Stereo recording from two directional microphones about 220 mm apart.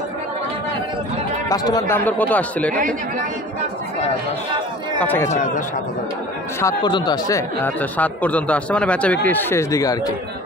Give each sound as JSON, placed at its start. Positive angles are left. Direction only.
{"t": 1.5, "sound": "speech", "side_deg": 15}
{"t": 4.9, "sound": "speech", "side_deg": 10}
{"t": 5.3, "sound": "a man's voice", "side_deg": 35}
{"t": 6.6, "sound": "speech", "side_deg": 20}